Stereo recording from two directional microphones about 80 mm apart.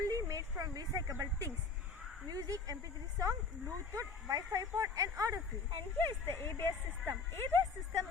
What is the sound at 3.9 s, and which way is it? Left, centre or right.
A woman's voice, right.